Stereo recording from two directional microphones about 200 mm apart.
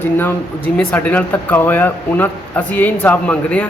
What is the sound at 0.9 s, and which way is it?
A man's voice, 10° left (ahead or behind).